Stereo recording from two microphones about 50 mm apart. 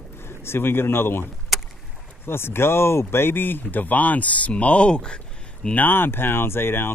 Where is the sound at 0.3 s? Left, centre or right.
Left.